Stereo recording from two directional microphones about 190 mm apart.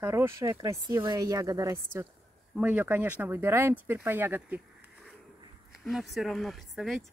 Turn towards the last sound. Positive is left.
turn(degrees=0)  # may be behind; listen again after turning